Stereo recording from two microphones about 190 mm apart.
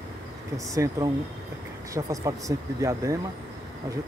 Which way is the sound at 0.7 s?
20° right (ahead or behind).